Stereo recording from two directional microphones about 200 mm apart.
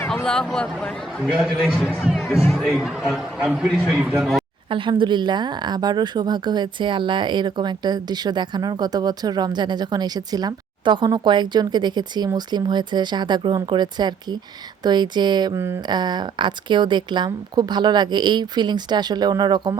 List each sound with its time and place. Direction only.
0.0 s a man's voice: 5° left (ahead or behind)
2.0 s music: centre (ahead or behind)
2.6 s a man's voice: centre (ahead or behind)
4.7 s a woman's voice: 25° right (ahead or behind)